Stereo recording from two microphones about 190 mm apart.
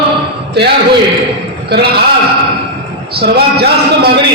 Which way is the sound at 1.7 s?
60° right (ahead or behind).